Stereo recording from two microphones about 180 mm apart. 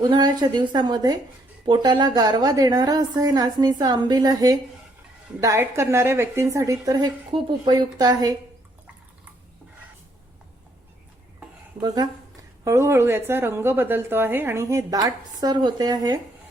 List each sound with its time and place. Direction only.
0.0 s a woman's voice: 25° right (ahead or behind)
11.8 s a woman's voice: 20° right (ahead or behind)